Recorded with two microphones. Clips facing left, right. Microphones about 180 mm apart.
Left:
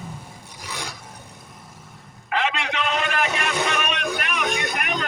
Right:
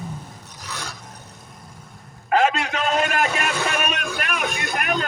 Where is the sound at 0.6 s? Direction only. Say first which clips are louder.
Left 1 dB; 15° left (ahead or behind).